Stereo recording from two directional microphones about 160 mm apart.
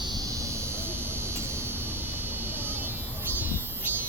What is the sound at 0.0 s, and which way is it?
Vehicle, 25° right (ahead or behind).